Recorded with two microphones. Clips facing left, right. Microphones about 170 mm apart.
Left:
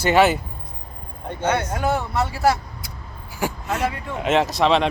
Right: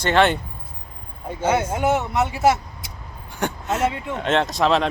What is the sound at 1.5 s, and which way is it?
Speech, 20° right (ahead or behind).